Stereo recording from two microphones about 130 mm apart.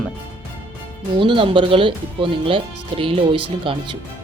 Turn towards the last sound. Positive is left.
turn(degrees=-45)  # may be behind; listen again after turning